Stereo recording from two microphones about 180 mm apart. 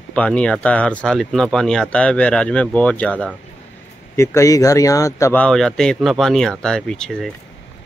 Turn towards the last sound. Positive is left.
turn(degrees=5)  # may be behind; listen again after turning